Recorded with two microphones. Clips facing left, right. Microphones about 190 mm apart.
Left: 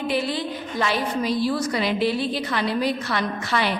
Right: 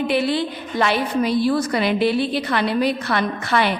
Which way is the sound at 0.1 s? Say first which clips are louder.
Right 4 dB; 65° right (ahead or behind).